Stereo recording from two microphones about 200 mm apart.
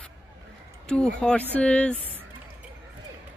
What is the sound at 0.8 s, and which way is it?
Speech, 5° left (ahead or behind).